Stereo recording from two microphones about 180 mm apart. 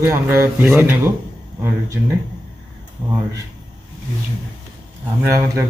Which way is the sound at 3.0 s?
20° right (ahead or behind).